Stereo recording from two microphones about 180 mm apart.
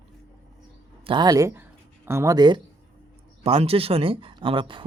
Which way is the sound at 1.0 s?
25° right (ahead or behind).